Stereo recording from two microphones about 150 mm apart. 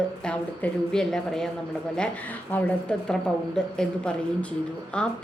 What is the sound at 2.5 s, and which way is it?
A woman's voice, 10° left (ahead or behind).